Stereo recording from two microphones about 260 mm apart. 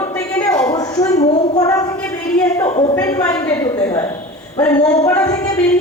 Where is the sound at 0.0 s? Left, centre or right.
Centre.